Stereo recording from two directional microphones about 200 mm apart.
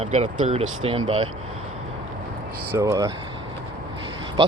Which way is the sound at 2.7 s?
15° right (ahead or behind).